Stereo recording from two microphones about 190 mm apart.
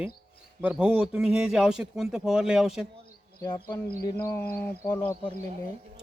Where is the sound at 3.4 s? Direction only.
25° left (ahead or behind).